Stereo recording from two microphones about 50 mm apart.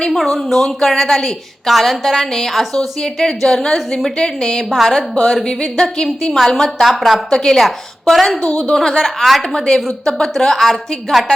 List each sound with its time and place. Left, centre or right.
0.2 s a woman's voice: centre
6.8 s a woman's voice: centre
8.4 s a woman's voice: left
8.7 s a woman's voice: centre